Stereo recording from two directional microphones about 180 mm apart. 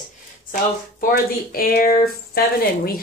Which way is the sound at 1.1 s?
55° left (ahead or behind).